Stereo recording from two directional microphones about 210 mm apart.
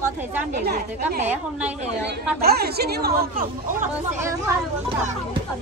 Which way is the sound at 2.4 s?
50° right (ahead or behind).